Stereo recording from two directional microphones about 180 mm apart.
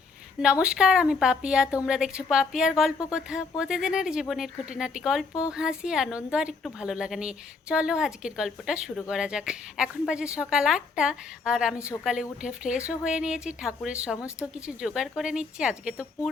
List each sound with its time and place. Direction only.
0.4 s a woman's voice: 5° right (ahead or behind)